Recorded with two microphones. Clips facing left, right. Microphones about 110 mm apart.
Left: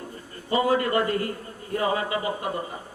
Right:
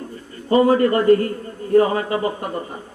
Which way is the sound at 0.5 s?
40° right (ahead or behind).